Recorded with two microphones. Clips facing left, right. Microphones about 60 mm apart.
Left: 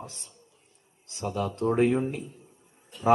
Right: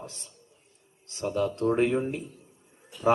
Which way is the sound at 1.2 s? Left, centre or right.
Right.